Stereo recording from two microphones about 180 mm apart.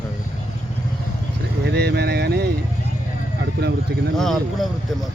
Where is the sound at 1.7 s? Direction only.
65° right (ahead or behind).